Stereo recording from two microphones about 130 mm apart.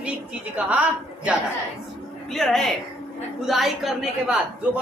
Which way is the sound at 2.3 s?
5° left (ahead or behind).